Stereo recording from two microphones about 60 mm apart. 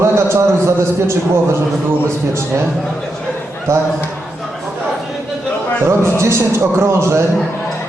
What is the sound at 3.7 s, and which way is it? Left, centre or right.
Speech, right.